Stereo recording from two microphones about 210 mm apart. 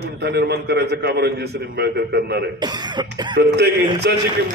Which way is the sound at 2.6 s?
20° right (ahead or behind).